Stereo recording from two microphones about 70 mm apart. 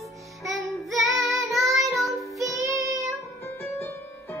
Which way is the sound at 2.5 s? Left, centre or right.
Right.